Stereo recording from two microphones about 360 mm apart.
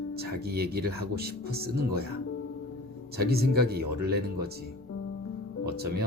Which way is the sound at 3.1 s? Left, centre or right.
Right.